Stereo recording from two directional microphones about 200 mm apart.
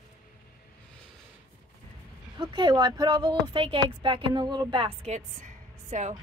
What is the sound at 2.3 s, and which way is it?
A woman's voice, 20° right (ahead or behind).